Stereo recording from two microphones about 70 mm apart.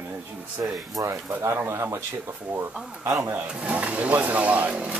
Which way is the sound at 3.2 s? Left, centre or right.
Right.